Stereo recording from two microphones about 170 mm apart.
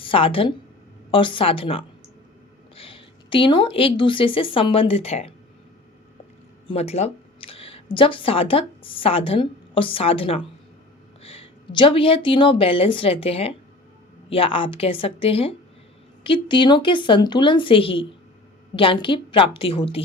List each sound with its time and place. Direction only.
0.0 s a woman's voice: 30° left (ahead or behind)
6.7 s a sound: 35° left (ahead or behind)
7.9 s a woman's voice: 30° left (ahead or behind)